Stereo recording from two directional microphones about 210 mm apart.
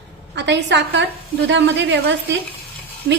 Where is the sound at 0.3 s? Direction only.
55° right (ahead or behind).